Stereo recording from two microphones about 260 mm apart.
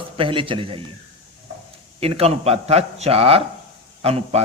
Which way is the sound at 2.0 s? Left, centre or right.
Right.